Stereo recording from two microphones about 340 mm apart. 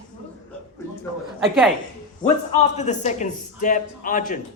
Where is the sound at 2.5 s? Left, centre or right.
Centre.